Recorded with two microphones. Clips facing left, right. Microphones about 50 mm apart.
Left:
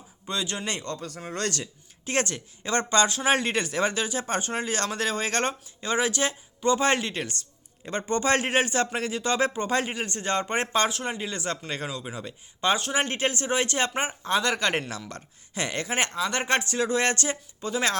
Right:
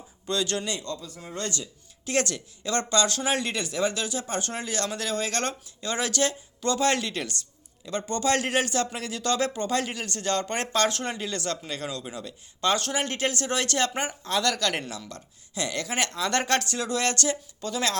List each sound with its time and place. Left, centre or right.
0.3 s speech: centre
0.6 s speech: left
2.0 s speech: left
10.8 s speech: centre